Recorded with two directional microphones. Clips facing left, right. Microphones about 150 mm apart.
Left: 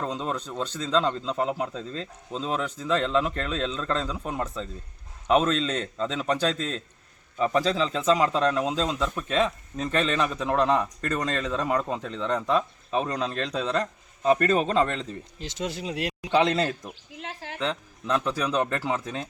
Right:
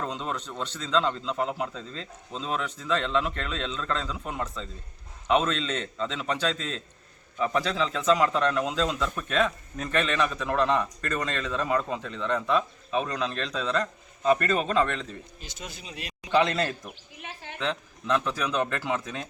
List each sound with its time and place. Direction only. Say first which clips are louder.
0.0 s a man's voice: left 2 dB; 35° left (ahead or behind)
15.4 s speech: left 10 dB; 90° left; by 16.3 s 75° left (ahead or behind)
17.2 s a sound: left 5 dB; 90° left
17.6 s a man's voice: left 1 dB; 30° left (ahead or behind)